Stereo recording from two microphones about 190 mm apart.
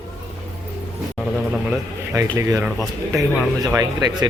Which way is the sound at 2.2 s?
15° right (ahead or behind).